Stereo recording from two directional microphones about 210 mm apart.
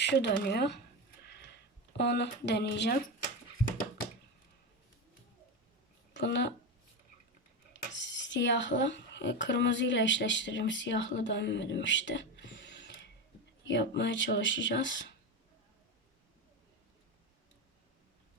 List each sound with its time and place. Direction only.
0.0 s speech: 55° left (ahead or behind)
1.2 s a sound: 50° left (ahead or behind)
2.0 s speech: 55° left (ahead or behind)
6.1 s speech: 55° left (ahead or behind)
7.7 s dishes: 60° left (ahead or behind)
13.7 s speech: 60° left (ahead or behind)